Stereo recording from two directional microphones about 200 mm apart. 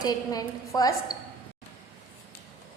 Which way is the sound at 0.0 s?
20° left (ahead or behind).